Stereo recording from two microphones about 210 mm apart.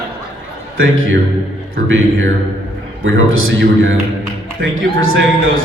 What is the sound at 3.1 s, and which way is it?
Speech, 70° right (ahead or behind).